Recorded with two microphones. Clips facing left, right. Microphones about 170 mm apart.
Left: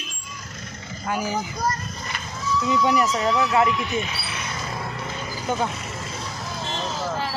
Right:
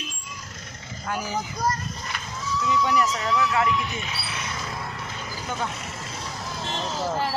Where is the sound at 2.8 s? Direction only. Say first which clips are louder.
Left 4 dB; 15° left (ahead or behind).